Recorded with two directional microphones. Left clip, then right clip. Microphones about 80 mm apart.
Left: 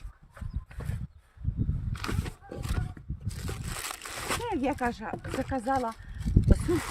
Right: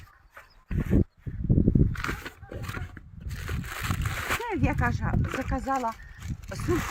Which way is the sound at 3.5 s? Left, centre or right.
Left.